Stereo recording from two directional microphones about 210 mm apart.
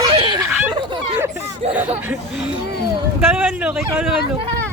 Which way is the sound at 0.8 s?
20° right (ahead or behind).